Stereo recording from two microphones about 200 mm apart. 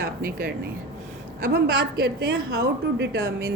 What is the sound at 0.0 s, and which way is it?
A woman's voice, 45° right (ahead or behind).